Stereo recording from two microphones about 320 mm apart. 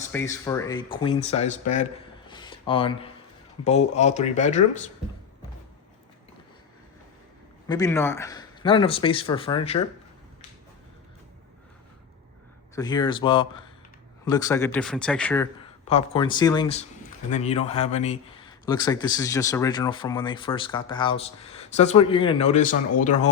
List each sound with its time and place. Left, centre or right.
0.1 s speech: centre
7.7 s speech: centre
12.7 s speech: centre
15.9 s speech: centre